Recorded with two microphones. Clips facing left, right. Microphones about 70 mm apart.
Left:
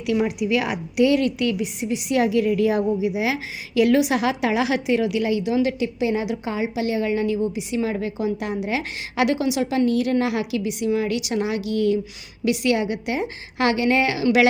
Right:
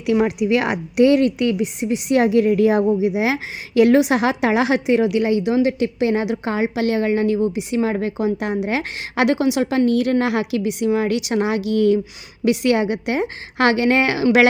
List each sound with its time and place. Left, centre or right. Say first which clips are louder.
0.3 s a woman's voice: right 4 dB; right
5.8 s a woman's voice: right 4 dB; right